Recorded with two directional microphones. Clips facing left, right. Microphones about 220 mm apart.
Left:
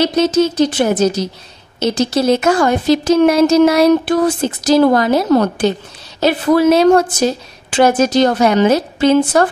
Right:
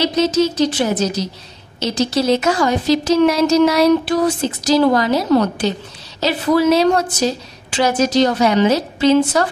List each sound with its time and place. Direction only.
0.0 s speech: 55° left (ahead or behind)